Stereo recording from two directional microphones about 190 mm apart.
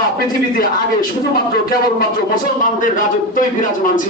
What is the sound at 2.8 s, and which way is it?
Speech, 45° left (ahead or behind).